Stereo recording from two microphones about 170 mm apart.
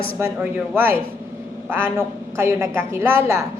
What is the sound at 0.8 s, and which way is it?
A woman's voice, 10° right (ahead or behind).